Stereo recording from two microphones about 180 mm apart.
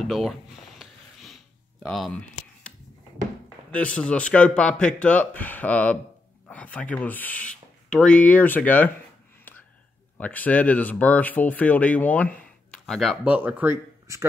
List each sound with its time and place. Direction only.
0.0 s a sound: centre (ahead or behind)
3.7 s speech: 5° left (ahead or behind)
10.1 s speech: 10° left (ahead or behind); by 14.2 s 15° right (ahead or behind)